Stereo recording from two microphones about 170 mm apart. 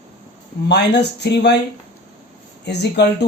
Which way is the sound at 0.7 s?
85° left.